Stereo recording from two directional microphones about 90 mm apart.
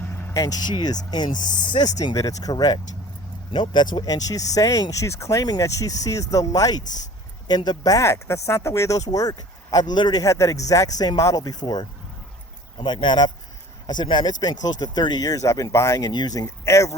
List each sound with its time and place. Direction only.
0.1 s vehicle: 25° left (ahead or behind)
0.3 s speech: 45° left (ahead or behind)
3.5 s speech: 60° left (ahead or behind)
7.9 s speech: 30° left (ahead or behind)
16.0 s speech: 50° left (ahead or behind)